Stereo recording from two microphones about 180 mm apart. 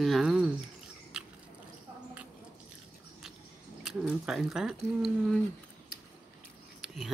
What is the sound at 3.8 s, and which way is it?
Speech, centre (ahead or behind).